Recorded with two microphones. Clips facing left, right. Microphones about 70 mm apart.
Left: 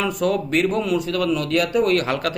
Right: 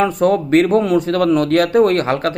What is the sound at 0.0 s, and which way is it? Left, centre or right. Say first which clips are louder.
A man's voice: right 6 dB; right.